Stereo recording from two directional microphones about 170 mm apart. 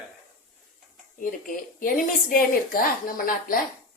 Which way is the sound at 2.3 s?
60° left (ahead or behind).